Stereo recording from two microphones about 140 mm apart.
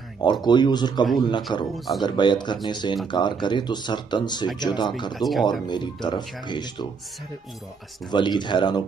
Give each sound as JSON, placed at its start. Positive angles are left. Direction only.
{"t": 0.2, "sound": "speech", "side_deg": 30}
{"t": 5.1, "sound": "speech", "side_deg": 0}
{"t": 5.7, "sound": "speech", "side_deg": 30}
{"t": 8.1, "sound": "speech", "side_deg": 35}